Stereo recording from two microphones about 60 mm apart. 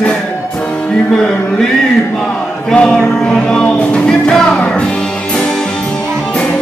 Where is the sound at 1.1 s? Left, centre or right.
Centre.